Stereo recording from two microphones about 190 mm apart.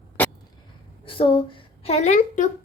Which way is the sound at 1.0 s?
30° left (ahead or behind).